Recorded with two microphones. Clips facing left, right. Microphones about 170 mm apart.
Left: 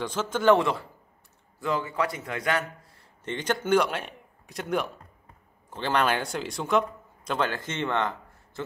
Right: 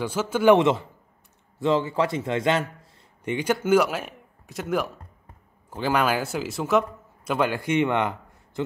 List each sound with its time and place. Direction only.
0.0 s a man's voice: 10° right (ahead or behind)
0.6 s a man's voice: 20° right (ahead or behind)
3.3 s a man's voice: 10° right (ahead or behind)